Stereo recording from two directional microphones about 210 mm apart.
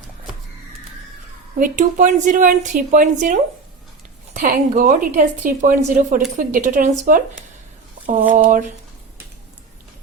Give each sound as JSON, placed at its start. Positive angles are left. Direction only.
{"t": 1.5, "sound": "a woman's voice", "side_deg": -40}